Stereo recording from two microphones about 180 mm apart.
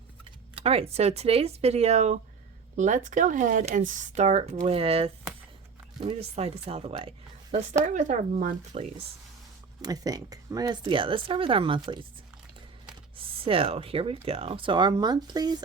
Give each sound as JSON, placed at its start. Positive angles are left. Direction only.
{"t": 0.5, "sound": "speech", "side_deg": -35}
{"t": 7.9, "sound": "speech", "side_deg": -45}
{"t": 9.8, "sound": "speech", "side_deg": -20}
{"t": 13.1, "sound": "speech", "side_deg": -30}